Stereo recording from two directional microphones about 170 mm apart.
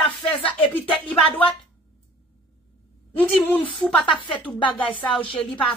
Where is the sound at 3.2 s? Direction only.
10° left (ahead or behind).